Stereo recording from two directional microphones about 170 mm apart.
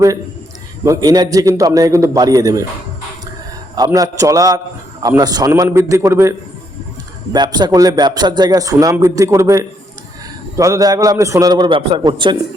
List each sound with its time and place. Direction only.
0.9 s speech: 20° right (ahead or behind)
3.8 s a man's voice: 20° right (ahead or behind)
7.3 s speech: 25° right (ahead or behind)